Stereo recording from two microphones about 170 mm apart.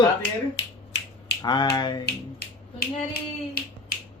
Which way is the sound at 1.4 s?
25° left (ahead or behind).